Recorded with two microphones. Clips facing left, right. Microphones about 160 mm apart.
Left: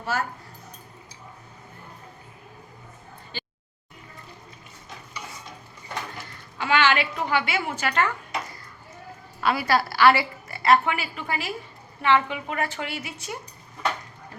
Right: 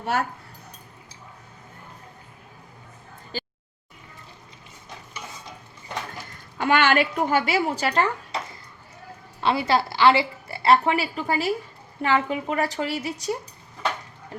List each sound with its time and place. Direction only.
0.0 s speech: 60° right (ahead or behind)
6.6 s speech: 50° right (ahead or behind); by 8.4 s 30° right (ahead or behind)
9.4 s a woman's voice: 25° right (ahead or behind)